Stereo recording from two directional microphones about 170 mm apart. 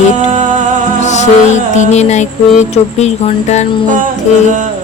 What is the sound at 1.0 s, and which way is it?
Music, 45° left (ahead or behind).